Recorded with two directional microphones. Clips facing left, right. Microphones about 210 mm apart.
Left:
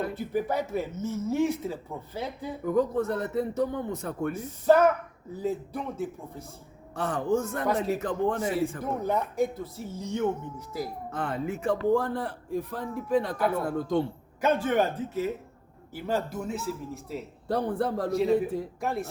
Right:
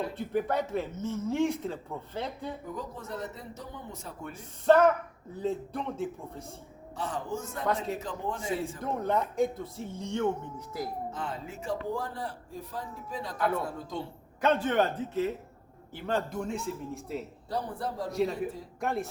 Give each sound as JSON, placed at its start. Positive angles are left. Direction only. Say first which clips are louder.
{"t": 0.1, "sound": "speech", "louder": "left 1 dB", "side_deg": 5}
{"t": 2.7, "sound": "speech", "louder": "left 13 dB", "side_deg": 60}
{"t": 4.3, "sound": "speech", "louder": "left 1 dB", "side_deg": 5}
{"t": 6.9, "sound": "speech", "louder": "left 8 dB", "side_deg": 55}
{"t": 8.8, "sound": "speech", "louder": "left 1 dB", "side_deg": 5}
{"t": 11.1, "sound": "speech", "louder": "left 6 dB", "side_deg": 60}
{"t": 14.4, "sound": "speech", "louder": "left 1 dB", "side_deg": 10}
{"t": 17.5, "sound": "speech", "louder": "left 7 dB", "side_deg": 60}
{"t": 18.1, "sound": "speech", "louder": "left 5 dB", "side_deg": 0}